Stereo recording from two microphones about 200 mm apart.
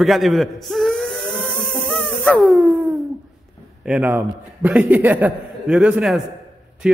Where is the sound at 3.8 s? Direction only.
5° right (ahead or behind).